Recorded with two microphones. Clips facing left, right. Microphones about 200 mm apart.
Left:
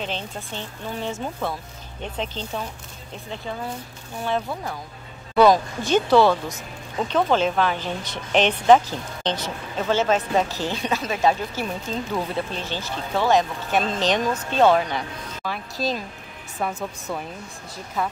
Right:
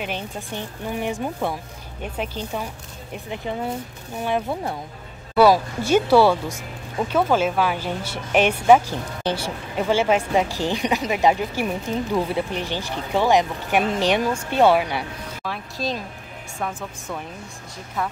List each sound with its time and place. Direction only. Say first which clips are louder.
0.0 s speech: right 1 dB; 15° right (ahead or behind)
5.3 s speech: even; 5° right (ahead or behind)
15.4 s speech: left 1 dB; centre (ahead or behind)